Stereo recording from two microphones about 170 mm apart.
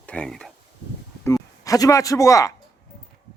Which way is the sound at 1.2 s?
20° left (ahead or behind).